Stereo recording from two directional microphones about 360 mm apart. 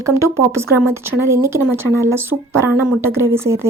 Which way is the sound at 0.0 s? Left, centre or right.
Centre.